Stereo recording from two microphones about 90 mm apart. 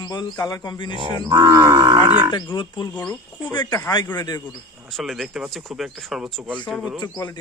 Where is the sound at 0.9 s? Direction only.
60° right (ahead or behind).